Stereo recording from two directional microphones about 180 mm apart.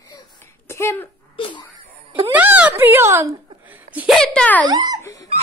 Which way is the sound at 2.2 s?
10° right (ahead or behind).